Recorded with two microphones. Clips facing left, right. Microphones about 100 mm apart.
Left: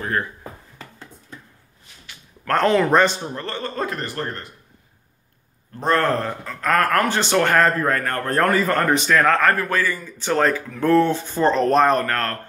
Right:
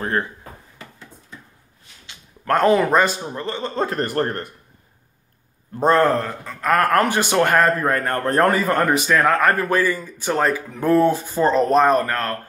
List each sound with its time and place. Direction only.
2.5 s a man's voice: 15° right (ahead or behind)
3.3 s speech: 15° right (ahead or behind)
4.0 s speech: 50° right (ahead or behind)
5.7 s a man's voice: 15° right (ahead or behind)
6.1 s speech: centre (ahead or behind)
6.8 s a man's voice: 15° right (ahead or behind)